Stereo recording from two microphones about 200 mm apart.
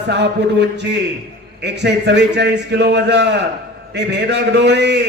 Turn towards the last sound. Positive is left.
turn(degrees=-55)  # may be behind; listen again after turning